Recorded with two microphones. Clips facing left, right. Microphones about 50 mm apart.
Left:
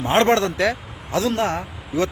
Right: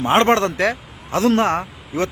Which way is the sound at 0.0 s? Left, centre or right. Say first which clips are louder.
Right 2 dB; right.